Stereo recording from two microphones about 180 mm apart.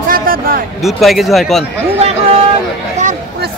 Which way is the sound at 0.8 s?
Centre (ahead or behind).